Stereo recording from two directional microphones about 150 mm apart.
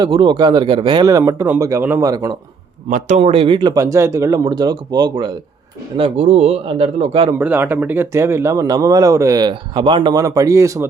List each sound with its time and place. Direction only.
0.0 s a man's voice: 35° right (ahead or behind)
1.0 s speech: 20° right (ahead or behind)
2.9 s speech: 50° right (ahead or behind); by 5.3 s 30° right (ahead or behind)
6.0 s a man's voice: 45° right (ahead or behind)
7.3 s speech: 15° right (ahead or behind)